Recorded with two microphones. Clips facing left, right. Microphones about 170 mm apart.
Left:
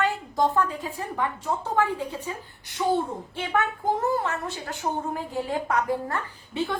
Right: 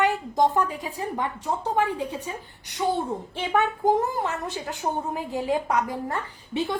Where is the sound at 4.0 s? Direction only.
15° right (ahead or behind).